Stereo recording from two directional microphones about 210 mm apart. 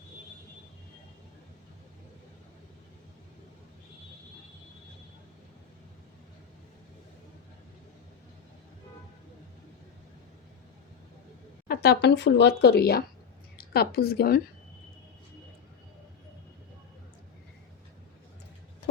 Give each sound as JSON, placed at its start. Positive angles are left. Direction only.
{"t": 11.7, "sound": "speech", "side_deg": 50}